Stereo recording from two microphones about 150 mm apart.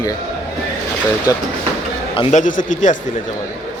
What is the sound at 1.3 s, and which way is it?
Speech, 25° left (ahead or behind).